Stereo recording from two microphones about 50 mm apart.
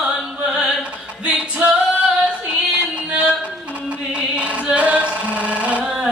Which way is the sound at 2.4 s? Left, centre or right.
Right.